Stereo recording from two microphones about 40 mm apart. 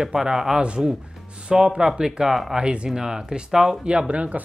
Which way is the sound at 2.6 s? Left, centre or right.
Right.